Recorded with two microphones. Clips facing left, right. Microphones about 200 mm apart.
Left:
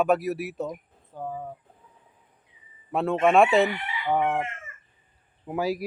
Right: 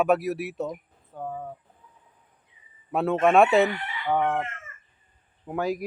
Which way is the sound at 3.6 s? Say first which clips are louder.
Even; 10° left (ahead or behind).